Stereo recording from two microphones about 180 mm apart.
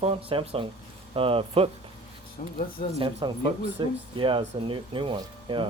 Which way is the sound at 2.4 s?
45° left (ahead or behind).